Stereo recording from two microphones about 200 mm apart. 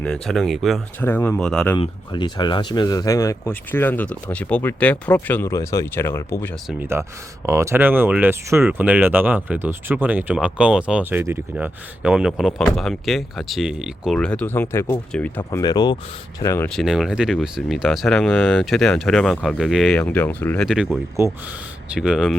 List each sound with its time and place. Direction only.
0.0 s speech: 5° left (ahead or behind)
1.8 s speech: 20° left (ahead or behind)
6.7 s speech: 10° right (ahead or behind); by 15.4 s 10° left (ahead or behind)
15.4 s speech: 20° left (ahead or behind)
16.6 s speech: centre (ahead or behind)
20.7 s speech: centre (ahead or behind)